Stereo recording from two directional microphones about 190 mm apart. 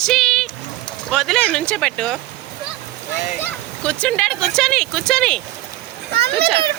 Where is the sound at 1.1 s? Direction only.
Centre (ahead or behind).